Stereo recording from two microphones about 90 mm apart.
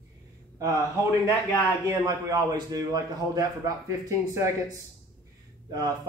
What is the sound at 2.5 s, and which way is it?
Speech, 45° right (ahead or behind).